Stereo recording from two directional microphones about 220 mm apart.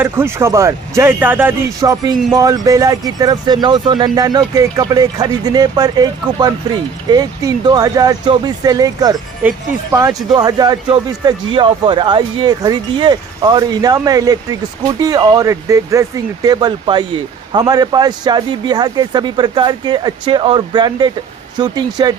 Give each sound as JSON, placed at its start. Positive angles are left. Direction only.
{"t": 0.0, "sound": "a man's voice", "side_deg": -10}